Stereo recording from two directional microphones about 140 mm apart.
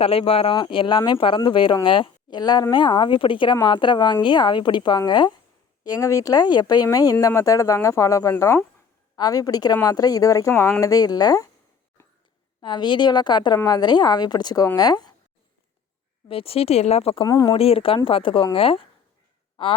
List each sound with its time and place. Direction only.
0.0 s speech: 45° left (ahead or behind); by 11.4 s 25° left (ahead or behind)
12.6 s speech: 35° left (ahead or behind)
16.3 s speech: 45° left (ahead or behind)
17.2 s speech: 25° left (ahead or behind)
17.5 s speech: 45° left (ahead or behind)